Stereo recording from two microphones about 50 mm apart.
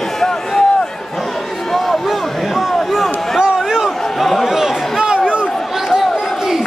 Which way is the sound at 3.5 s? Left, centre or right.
Centre.